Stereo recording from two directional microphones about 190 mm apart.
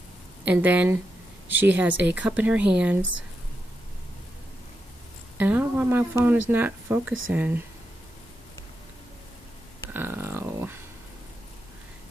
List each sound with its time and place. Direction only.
0.5 s a woman's voice: 10° right (ahead or behind)
5.4 s a woman's voice: 10° right (ahead or behind)
9.9 s a sound: 10° right (ahead or behind)